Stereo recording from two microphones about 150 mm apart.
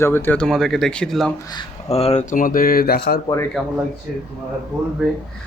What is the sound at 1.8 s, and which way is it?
Speech, 45° left (ahead or behind).